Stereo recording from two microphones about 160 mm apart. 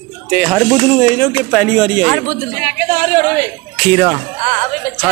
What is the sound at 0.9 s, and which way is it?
A man's voice, 10° left (ahead or behind).